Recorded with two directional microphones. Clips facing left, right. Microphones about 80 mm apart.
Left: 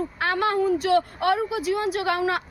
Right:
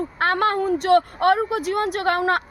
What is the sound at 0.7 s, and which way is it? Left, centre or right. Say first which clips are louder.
A woman's voice: right 4 dB; right.